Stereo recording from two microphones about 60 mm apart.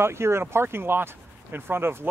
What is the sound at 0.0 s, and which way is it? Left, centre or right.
Speech, right.